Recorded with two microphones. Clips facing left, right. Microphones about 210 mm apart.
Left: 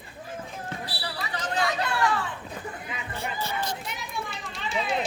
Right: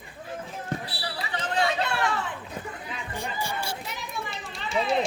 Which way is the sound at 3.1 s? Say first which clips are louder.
Even; 15° right (ahead or behind).